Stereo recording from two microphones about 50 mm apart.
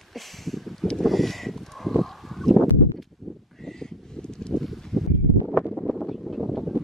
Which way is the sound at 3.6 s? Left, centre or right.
Centre.